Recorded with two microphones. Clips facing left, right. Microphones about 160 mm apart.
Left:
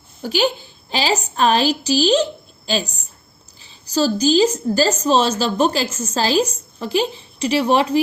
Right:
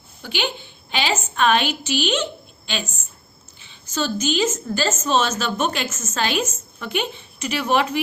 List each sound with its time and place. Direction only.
0.2 s a woman's voice: 40° left (ahead or behind)